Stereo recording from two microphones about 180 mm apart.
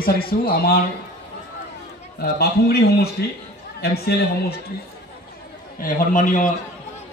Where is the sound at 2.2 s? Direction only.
65° left (ahead or behind).